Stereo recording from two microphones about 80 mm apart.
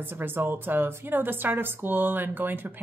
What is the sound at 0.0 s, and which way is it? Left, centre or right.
A woman's voice, right.